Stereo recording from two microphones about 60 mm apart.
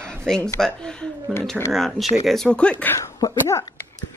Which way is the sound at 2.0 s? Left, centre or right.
Centre.